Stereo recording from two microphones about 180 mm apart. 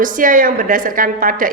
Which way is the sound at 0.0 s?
50° right (ahead or behind).